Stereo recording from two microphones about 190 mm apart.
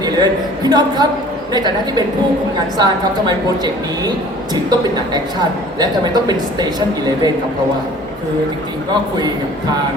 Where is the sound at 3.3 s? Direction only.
20° right (ahead or behind).